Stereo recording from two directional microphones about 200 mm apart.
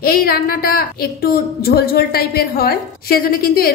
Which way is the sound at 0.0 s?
50° left (ahead or behind).